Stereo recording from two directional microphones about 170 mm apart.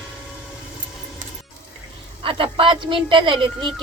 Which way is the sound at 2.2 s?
30° right (ahead or behind).